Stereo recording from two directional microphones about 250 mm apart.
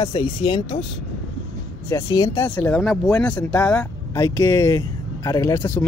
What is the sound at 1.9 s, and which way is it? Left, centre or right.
Speech, centre.